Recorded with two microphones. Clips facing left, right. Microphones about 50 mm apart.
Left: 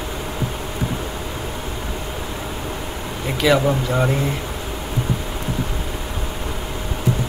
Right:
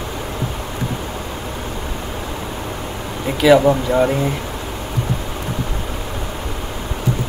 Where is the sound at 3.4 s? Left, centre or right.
Centre.